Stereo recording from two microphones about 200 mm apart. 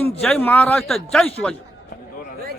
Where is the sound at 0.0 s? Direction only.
10° left (ahead or behind).